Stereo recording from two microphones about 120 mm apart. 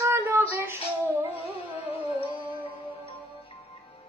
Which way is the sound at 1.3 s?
55° left (ahead or behind).